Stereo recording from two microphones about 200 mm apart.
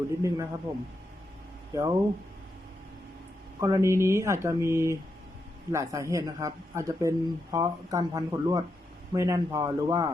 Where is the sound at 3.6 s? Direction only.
15° right (ahead or behind).